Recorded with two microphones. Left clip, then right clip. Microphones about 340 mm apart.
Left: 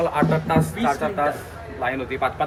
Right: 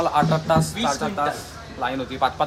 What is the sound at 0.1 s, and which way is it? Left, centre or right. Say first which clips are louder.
Speech: right 1 dB; centre.